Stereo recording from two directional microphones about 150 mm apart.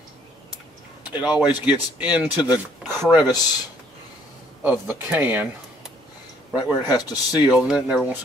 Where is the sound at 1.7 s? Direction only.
10° right (ahead or behind).